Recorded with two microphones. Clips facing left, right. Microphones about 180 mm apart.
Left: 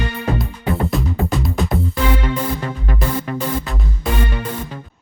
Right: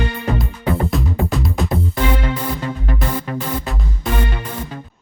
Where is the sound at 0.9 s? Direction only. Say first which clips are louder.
Even; centre (ahead or behind).